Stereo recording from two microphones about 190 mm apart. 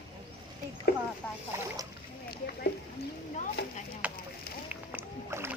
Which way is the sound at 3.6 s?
60° left (ahead or behind).